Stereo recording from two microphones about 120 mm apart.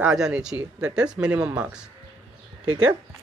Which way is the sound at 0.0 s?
5° right (ahead or behind).